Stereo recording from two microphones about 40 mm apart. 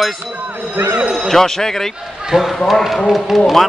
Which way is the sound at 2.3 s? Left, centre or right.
Centre.